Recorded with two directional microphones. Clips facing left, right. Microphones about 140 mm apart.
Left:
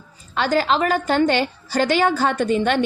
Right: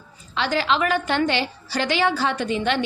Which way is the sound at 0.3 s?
45° left (ahead or behind).